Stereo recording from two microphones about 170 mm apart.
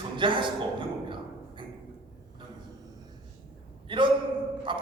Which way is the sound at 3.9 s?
30° right (ahead or behind).